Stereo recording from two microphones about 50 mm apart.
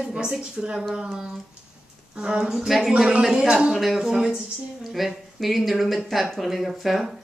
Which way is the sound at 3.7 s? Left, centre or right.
Centre.